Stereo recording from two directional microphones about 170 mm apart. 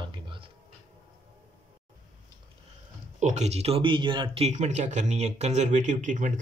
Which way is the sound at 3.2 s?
45° right (ahead or behind).